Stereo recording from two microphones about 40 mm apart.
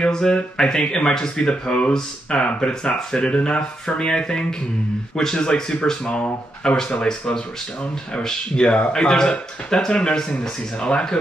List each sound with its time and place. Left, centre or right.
0.1 s speech: centre